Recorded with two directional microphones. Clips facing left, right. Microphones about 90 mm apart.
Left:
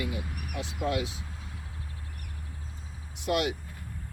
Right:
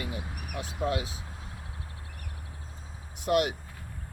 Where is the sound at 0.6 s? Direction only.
40° right (ahead or behind).